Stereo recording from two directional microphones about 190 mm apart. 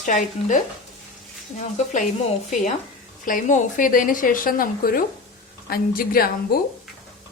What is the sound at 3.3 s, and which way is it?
A woman's voice, 45° left (ahead or behind).